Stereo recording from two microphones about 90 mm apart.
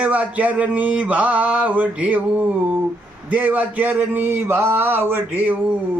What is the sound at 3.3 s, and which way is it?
Speech, 15° right (ahead or behind).